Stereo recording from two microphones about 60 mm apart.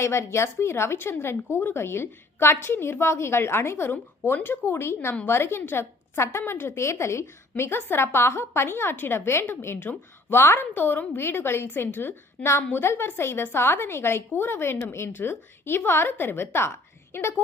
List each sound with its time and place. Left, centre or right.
0.0 s a woman's voice: left